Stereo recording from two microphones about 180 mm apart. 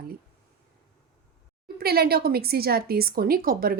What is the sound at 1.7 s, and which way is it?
A woman's voice, 60° right (ahead or behind).